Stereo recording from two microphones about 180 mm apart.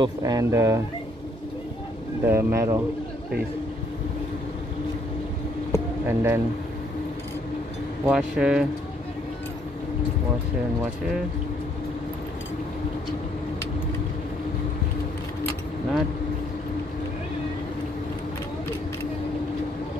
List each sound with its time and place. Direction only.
0.0 s speech: 20° right (ahead or behind)
2.2 s speech: 15° right (ahead or behind)
5.7 s a sound: 15° right (ahead or behind)
8.0 s speech: 5° right (ahead or behind)